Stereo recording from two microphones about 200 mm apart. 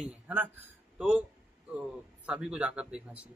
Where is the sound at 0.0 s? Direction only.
10° right (ahead or behind).